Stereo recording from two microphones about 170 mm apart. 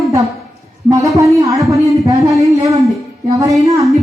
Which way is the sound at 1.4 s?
20° right (ahead or behind).